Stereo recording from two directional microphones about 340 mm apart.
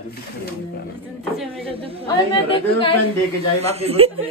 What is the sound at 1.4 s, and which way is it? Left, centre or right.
Speech, centre.